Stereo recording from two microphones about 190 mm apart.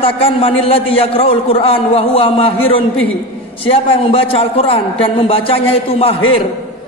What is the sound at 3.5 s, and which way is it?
A man's voice, 30° left (ahead or behind).